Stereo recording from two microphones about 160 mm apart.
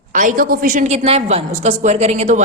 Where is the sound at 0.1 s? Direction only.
55° right (ahead or behind).